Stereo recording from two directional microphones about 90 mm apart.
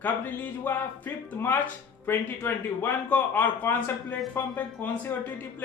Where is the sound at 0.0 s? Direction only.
20° left (ahead or behind).